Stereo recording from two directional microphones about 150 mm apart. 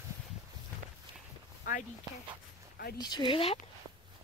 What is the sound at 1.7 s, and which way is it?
Speech, 60° left (ahead or behind).